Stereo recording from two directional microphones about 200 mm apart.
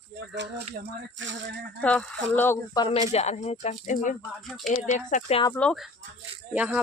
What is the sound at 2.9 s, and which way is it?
Speech, 30° left (ahead or behind).